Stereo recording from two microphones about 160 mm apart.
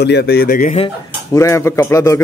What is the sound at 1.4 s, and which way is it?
Speech, 15° left (ahead or behind).